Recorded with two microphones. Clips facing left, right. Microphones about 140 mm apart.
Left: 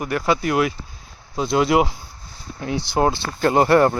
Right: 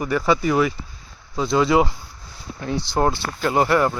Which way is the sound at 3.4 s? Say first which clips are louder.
Left 4 dB; 35° left (ahead or behind).